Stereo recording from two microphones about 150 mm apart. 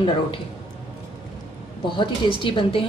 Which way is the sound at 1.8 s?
35° left (ahead or behind).